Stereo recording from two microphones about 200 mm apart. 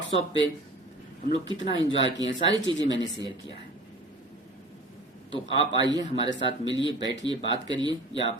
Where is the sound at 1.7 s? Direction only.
25° right (ahead or behind).